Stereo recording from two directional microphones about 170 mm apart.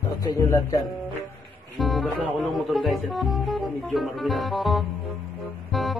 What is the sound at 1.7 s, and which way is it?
Speech, centre (ahead or behind).